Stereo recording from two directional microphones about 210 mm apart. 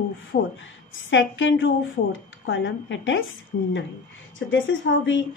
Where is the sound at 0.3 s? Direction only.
60° left (ahead or behind).